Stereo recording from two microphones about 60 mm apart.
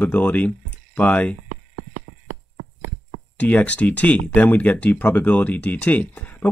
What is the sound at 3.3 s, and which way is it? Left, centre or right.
Speech, left.